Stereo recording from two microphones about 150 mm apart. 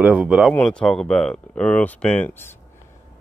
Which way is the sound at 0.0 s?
5° right (ahead or behind).